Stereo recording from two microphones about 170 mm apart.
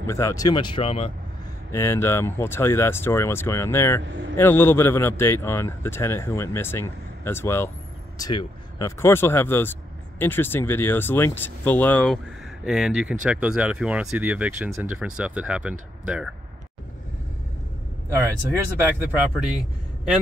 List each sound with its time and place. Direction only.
0.0 s speech: 15° left (ahead or behind); by 1.1 s 35° left (ahead or behind)
1.7 s speech: 15° left (ahead or behind)
4.1 s a man's voice: 90° right
4.4 s speech: 15° left (ahead or behind)
12.6 s speech: 5° right (ahead or behind)
18.8 s speech: 10° right (ahead or behind)